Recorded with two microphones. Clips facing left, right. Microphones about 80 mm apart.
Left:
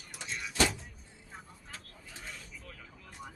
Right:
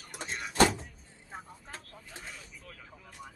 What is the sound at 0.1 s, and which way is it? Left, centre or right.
Door, right.